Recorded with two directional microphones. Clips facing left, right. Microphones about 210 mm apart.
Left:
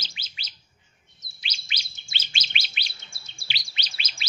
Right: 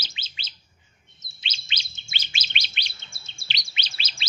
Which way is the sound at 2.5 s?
5° left (ahead or behind).